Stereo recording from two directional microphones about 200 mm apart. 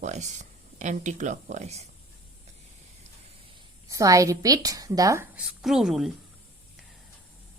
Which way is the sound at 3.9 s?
15° right (ahead or behind).